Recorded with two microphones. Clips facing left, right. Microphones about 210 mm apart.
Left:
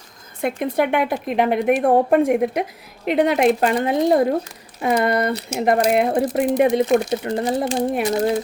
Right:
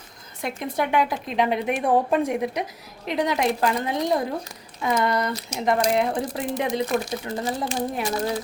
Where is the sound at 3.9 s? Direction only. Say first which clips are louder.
Left 7 dB; 55° left (ahead or behind).